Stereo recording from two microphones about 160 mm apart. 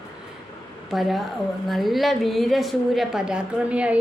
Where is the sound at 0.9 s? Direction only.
Centre (ahead or behind).